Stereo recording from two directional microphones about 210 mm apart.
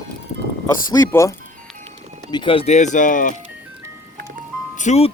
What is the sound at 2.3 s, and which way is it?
Speech, 25° left (ahead or behind).